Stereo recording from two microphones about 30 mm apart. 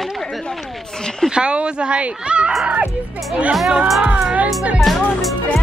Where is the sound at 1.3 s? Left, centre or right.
Right.